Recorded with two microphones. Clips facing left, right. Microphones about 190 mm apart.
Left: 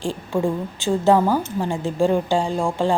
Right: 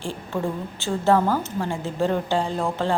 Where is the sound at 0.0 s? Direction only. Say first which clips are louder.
Left 5 dB; 15° left (ahead or behind).